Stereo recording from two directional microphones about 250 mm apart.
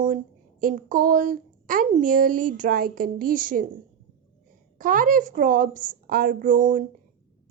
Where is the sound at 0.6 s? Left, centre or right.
Right.